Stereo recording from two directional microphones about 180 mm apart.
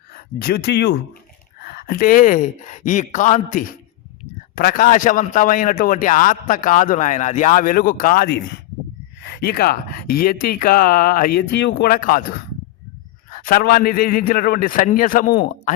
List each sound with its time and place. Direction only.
0.1 s speech: 60° left (ahead or behind)
1.6 s a man's voice: 60° left (ahead or behind)
13.3 s a man's voice: 50° left (ahead or behind)